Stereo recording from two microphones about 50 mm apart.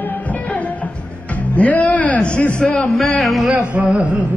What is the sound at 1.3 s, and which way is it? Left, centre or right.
A man's voice, left.